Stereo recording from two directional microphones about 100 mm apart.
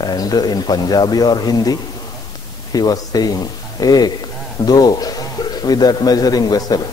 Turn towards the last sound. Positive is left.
turn(degrees=40)  # may be behind; listen again after turning